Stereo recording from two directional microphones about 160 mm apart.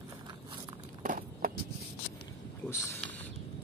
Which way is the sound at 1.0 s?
65° right (ahead or behind).